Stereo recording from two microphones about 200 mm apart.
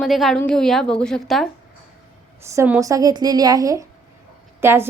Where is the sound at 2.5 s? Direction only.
15° right (ahead or behind).